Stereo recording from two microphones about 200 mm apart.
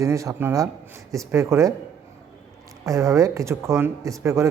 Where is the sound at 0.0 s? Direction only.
15° right (ahead or behind).